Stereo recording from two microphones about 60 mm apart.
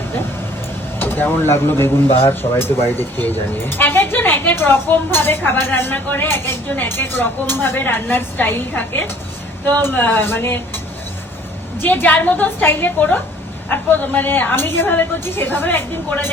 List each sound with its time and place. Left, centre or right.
0.9 s speech: left
11.8 s speech: left